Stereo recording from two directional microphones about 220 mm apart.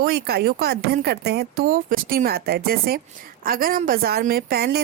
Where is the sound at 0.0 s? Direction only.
45° right (ahead or behind).